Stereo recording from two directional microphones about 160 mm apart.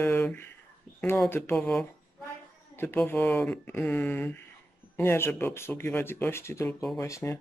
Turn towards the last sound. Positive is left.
turn(degrees=15)  # may be behind; listen again after turning